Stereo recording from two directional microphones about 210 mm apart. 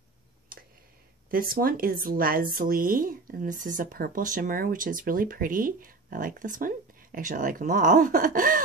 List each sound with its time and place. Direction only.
1.3 s speech: 45° right (ahead or behind)